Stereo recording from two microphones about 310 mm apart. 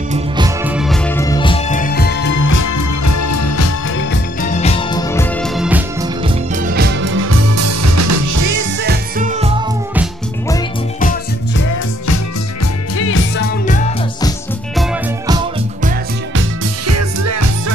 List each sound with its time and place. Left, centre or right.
0.7 s music: centre; by 2.4 s left
2.4 s music: left
4.1 s music: left; by 6.0 s centre
6.2 s music: right
8.8 s music: right
11.0 s music: left
12.9 s music: left
16.8 s music: right